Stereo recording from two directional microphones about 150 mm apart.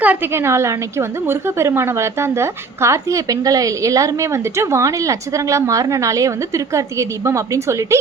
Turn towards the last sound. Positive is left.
turn(degrees=-20)  # may be behind; listen again after turning